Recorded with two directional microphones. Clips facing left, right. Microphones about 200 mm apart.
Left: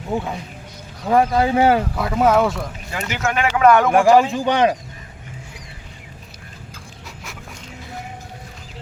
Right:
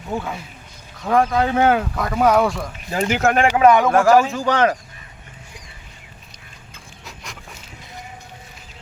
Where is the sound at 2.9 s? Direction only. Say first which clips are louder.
Right 9 dB; 30° right (ahead or behind).